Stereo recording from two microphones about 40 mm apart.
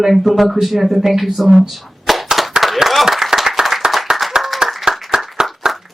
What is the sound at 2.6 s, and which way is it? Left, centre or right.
Applause, centre.